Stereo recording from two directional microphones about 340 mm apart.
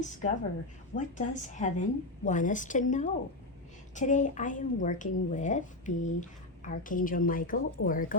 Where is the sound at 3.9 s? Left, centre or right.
Left.